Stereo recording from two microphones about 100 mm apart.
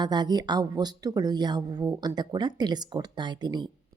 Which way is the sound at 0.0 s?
45° right (ahead or behind).